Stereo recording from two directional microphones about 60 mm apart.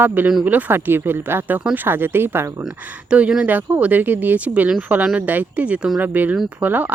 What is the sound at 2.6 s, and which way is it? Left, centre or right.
Speech, right.